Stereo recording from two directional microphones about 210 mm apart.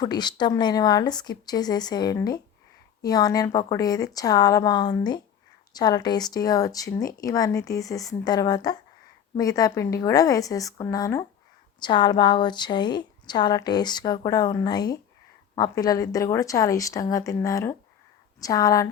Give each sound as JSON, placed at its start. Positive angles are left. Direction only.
{"t": 0.0, "sound": "a woman's voice", "side_deg": 20}